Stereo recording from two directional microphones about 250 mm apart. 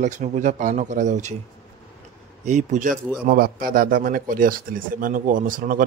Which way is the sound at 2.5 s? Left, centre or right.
Right.